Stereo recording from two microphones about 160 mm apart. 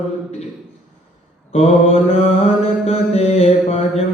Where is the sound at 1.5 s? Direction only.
40° left (ahead or behind).